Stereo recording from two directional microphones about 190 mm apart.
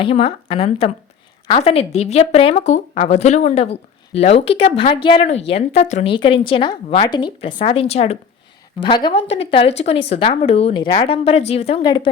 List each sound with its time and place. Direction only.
0.0 s speech: 30° left (ahead or behind)